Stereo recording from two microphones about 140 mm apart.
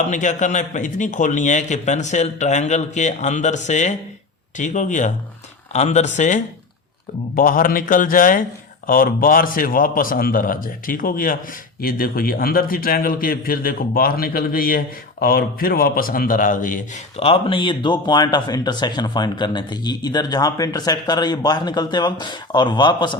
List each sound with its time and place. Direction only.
0.1 s a man's voice: 60° left (ahead or behind)
7.3 s a man's voice: 80° left
8.9 s a man's voice: 90° left; by 17.0 s 70° left (ahead or behind)
17.2 s speech: 45° left (ahead or behind)